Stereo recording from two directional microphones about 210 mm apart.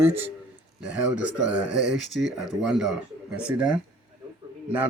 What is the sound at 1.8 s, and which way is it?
Speech, 55° right (ahead or behind).